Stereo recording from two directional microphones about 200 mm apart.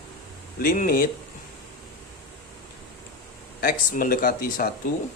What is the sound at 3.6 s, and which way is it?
Speech, 45° left (ahead or behind).